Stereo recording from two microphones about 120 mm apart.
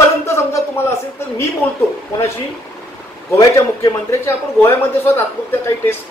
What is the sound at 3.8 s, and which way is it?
A man's voice, 25° left (ahead or behind).